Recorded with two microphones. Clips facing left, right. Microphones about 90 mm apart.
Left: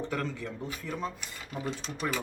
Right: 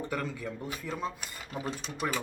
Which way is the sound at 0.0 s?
10° right (ahead or behind).